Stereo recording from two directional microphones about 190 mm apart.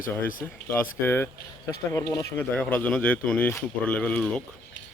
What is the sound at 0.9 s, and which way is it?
Speech, 10° left (ahead or behind).